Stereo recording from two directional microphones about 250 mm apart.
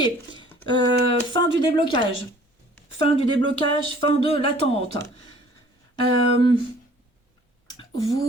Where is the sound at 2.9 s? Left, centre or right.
Left.